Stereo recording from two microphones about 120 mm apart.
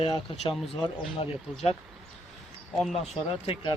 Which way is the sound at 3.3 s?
50° left (ahead or behind).